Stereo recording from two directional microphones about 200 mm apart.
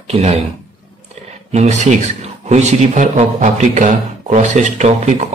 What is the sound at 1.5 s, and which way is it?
Speech, 35° right (ahead or behind).